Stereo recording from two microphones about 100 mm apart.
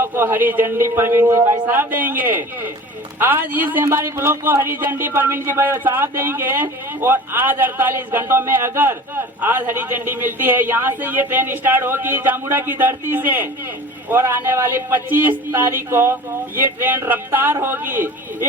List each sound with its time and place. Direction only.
0.0 s speech: 20° right (ahead or behind)